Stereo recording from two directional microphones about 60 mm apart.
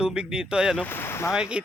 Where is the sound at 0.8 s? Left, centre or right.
Left.